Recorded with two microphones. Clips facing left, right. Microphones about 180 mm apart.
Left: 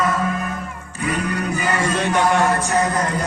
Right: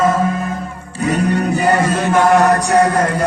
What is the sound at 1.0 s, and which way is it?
Music, 35° right (ahead or behind).